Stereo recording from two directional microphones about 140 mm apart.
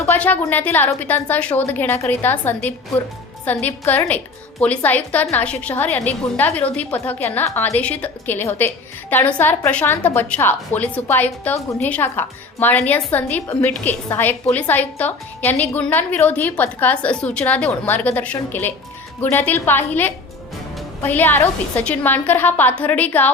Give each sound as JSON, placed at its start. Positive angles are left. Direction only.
{"t": 0.0, "sound": "a woman's voice", "side_deg": 15}